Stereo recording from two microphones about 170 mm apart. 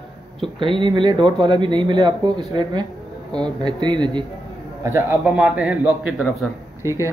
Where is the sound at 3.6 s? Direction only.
25° right (ahead or behind).